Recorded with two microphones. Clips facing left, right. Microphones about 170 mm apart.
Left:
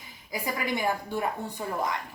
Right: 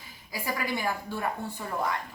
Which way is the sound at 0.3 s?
20° left (ahead or behind).